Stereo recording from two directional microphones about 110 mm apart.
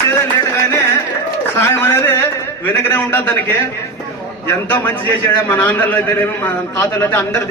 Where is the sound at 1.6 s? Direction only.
20° left (ahead or behind).